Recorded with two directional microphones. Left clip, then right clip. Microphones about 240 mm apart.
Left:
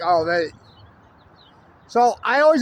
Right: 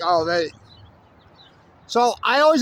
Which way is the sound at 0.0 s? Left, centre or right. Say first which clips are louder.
Left 1 dB; centre.